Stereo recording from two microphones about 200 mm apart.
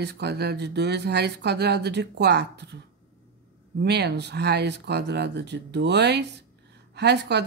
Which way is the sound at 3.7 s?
55° right (ahead or behind).